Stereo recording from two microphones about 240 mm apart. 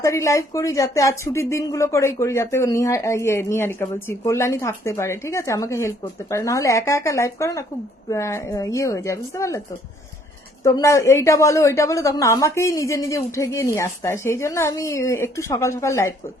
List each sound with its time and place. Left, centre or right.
0.0 s speech: centre
10.6 s speech: centre